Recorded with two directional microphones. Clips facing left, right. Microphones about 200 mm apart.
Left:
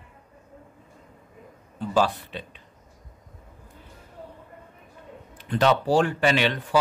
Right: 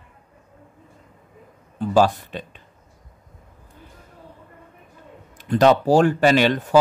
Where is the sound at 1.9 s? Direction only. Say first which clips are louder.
Right 5 dB; 45° right (ahead or behind).